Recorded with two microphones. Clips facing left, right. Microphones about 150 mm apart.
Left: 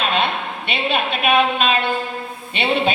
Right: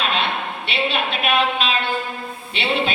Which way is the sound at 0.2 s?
50° left (ahead or behind).